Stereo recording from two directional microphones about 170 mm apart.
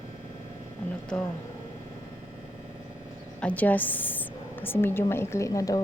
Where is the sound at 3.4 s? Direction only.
10° left (ahead or behind).